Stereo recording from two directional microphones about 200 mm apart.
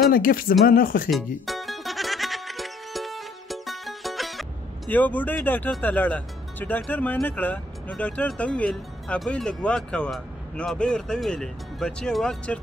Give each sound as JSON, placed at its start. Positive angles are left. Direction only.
{"t": 0.1, "sound": "speech", "side_deg": 45}
{"t": 1.1, "sound": "speech", "side_deg": 0}